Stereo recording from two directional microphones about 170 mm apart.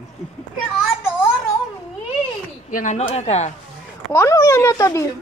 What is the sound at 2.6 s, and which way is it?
Speech, 50° left (ahead or behind).